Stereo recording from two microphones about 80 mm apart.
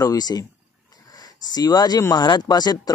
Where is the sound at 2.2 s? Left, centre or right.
Left.